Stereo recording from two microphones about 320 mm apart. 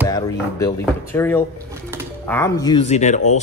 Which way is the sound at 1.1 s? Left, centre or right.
Centre.